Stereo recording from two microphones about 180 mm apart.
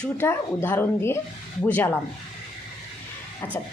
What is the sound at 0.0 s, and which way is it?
A woman's voice, 10° left (ahead or behind).